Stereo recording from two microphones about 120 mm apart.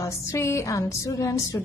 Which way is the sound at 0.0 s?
25° left (ahead or behind).